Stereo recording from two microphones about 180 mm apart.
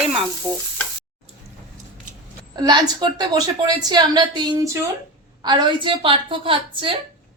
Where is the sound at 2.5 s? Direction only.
25° right (ahead or behind).